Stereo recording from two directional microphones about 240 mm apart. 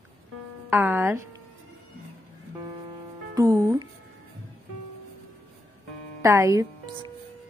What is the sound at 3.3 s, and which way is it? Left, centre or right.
Speech, centre.